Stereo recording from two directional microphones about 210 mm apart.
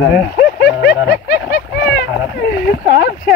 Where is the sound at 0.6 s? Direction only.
50° left (ahead or behind).